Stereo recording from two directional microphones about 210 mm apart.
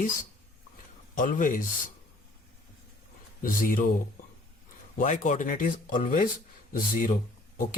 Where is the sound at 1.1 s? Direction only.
40° left (ahead or behind).